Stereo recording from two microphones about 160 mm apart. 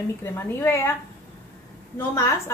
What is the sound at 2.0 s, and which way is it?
Speech, 15° left (ahead or behind).